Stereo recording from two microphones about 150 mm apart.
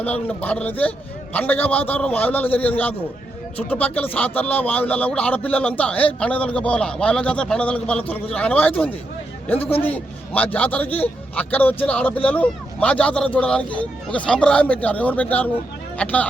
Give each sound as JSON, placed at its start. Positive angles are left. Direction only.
{"t": 0.0, "sound": "speech", "side_deg": 10}
{"t": 9.6, "sound": "a man's voice", "side_deg": 40}
{"t": 9.9, "sound": "speech", "side_deg": 10}